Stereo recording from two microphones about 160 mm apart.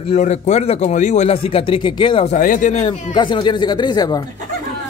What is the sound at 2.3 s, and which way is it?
Speech, 55° left (ahead or behind).